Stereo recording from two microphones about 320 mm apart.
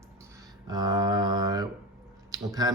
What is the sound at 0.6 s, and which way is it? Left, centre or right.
Speech, centre.